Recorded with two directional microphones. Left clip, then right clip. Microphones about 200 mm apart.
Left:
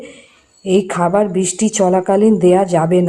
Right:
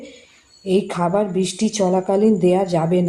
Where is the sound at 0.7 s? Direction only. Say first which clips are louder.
Left 5 dB; 15° left (ahead or behind).